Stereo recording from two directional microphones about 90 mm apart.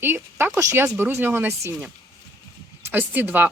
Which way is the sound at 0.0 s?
25° right (ahead or behind).